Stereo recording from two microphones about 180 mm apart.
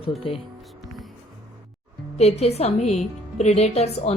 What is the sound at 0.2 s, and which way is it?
Speech, 30° left (ahead or behind).